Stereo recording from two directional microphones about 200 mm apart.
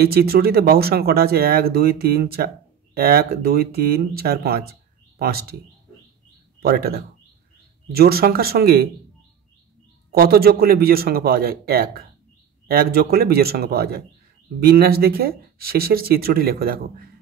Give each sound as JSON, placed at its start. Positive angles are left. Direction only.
{"t": 0.0, "sound": "speech", "side_deg": -50}
{"t": 6.6, "sound": "speech", "side_deg": -50}
{"t": 10.1, "sound": "speech", "side_deg": -50}